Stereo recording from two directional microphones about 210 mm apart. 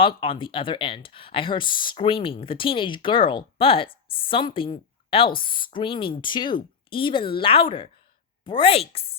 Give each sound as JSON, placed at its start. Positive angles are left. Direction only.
{"t": 0.0, "sound": "speech", "side_deg": 25}